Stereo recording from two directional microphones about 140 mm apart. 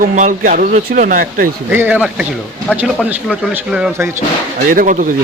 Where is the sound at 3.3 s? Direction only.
5° right (ahead or behind).